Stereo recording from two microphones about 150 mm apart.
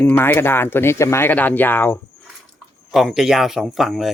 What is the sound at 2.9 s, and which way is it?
Speech, centre (ahead or behind).